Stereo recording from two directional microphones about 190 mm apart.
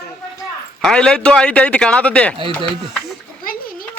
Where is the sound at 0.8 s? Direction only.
5° left (ahead or behind).